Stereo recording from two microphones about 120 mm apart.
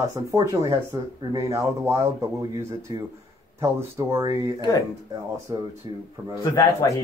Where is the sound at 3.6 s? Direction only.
25° right (ahead or behind).